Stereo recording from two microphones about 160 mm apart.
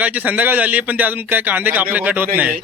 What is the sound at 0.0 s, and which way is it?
A man's voice, 10° right (ahead or behind).